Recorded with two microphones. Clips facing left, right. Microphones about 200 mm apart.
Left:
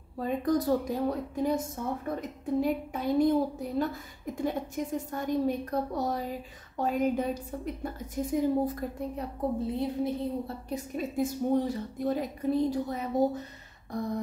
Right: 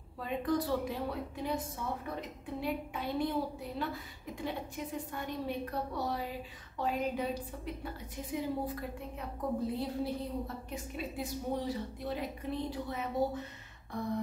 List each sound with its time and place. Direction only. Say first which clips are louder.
0.2 s a woman's voice: left 5 dB; 40° left (ahead or behind)
9.7 s a woman's voice: left 5 dB; 20° left (ahead or behind)
10.7 s a woman's voice: left 6 dB; 45° left (ahead or behind)